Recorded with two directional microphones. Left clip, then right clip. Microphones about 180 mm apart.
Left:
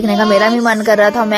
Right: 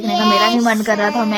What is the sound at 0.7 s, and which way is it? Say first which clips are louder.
Speech: left 6 dB; 30° left (ahead or behind).